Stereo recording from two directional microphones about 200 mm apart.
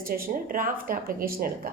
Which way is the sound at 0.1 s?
45° right (ahead or behind).